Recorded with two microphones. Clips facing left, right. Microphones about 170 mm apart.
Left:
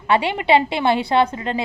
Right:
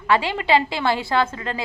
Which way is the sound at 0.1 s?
20° left (ahead or behind).